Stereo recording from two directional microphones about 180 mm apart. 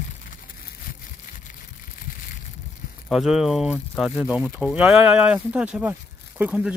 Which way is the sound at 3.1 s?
Centre (ahead or behind).